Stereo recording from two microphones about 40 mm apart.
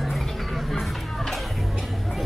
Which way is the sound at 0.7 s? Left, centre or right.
Centre.